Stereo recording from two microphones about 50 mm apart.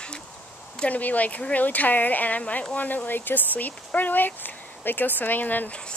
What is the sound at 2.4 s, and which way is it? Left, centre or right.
Speech, left.